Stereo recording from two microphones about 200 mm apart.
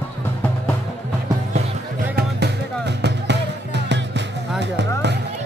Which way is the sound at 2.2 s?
55° right (ahead or behind).